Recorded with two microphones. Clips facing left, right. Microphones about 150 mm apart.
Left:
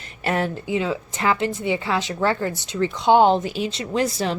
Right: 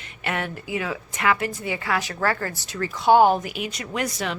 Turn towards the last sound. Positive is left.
turn(degrees=30)  # may be behind; listen again after turning